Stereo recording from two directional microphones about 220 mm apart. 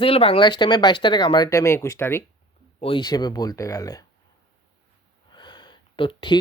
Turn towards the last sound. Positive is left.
turn(degrees=20)  # may be behind; listen again after turning